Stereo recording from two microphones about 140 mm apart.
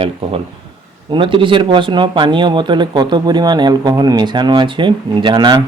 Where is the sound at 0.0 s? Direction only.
40° right (ahead or behind).